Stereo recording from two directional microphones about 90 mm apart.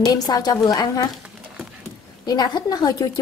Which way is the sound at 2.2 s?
50° left (ahead or behind).